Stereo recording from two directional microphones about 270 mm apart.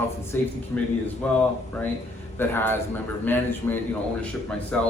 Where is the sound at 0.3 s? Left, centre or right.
Centre.